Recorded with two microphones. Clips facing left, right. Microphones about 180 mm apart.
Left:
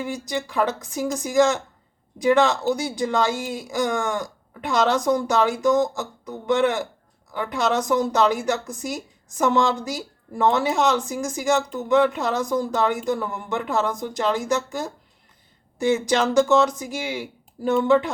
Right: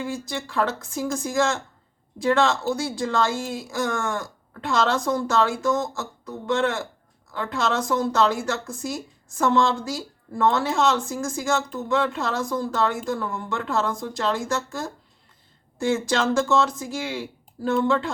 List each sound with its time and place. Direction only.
0.0 s a woman's voice: 15° left (ahead or behind)
16.0 s a woman's voice: 15° left (ahead or behind)